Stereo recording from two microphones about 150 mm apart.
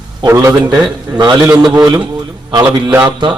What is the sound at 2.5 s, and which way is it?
Speech, 30° right (ahead or behind).